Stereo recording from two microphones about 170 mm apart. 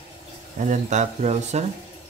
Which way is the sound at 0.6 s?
45° right (ahead or behind).